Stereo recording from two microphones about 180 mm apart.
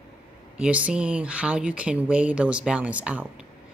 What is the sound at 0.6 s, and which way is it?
Speech, 5° right (ahead or behind).